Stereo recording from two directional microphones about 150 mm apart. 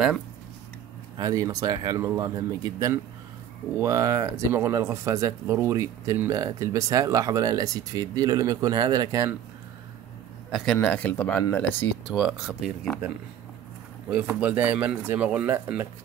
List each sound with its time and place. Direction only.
1.1 s speech: 25° right (ahead or behind)
10.5 s speech: 5° left (ahead or behind)
12.1 s speech: 5° right (ahead or behind)
14.1 s speech: 10° right (ahead or behind)